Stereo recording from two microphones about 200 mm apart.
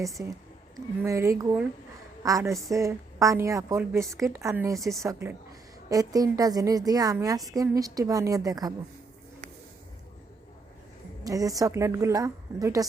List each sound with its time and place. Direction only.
0.2 s a woman's voice: 10° right (ahead or behind)
4.8 s speech: centre (ahead or behind)
5.0 s a woman's voice: 15° right (ahead or behind)
11.2 s a woman's voice: 15° right (ahead or behind)